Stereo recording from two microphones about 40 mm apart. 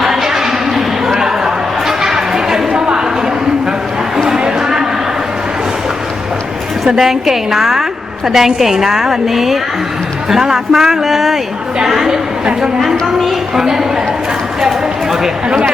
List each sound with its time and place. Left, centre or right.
0.0 s a sound: centre
2.0 s chatter: centre
4.3 s a sound: centre
6.8 s a woman's voice: centre
13.6 s a woman's voice: centre
15.4 s speech: right